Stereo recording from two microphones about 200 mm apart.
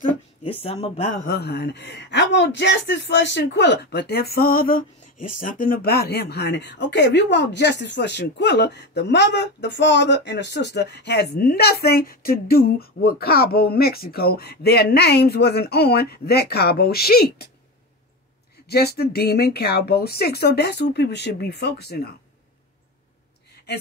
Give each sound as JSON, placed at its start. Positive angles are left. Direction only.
{"t": 0.5, "sound": "speech", "side_deg": 30}
{"t": 1.1, "sound": "a man's voice", "side_deg": 50}
{"t": 18.7, "sound": "speech", "side_deg": 50}